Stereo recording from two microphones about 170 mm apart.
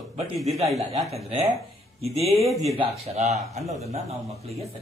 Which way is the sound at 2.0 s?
35° right (ahead or behind).